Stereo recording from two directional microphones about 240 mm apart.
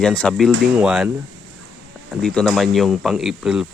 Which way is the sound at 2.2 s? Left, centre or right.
Centre.